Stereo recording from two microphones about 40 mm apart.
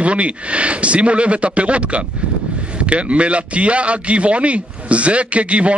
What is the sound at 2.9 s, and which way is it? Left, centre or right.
A man's voice, right.